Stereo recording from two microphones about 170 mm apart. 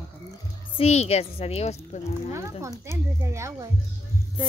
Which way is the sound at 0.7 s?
40° left (ahead or behind).